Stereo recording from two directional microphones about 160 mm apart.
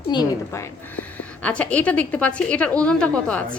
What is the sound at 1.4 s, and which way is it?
A woman's voice, 10° left (ahead or behind).